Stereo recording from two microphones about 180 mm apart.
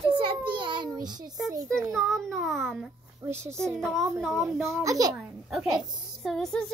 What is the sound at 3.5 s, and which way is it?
A child's voice, 5° left (ahead or behind).